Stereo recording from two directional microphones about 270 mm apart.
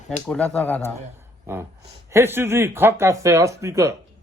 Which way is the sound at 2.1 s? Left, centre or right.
Centre.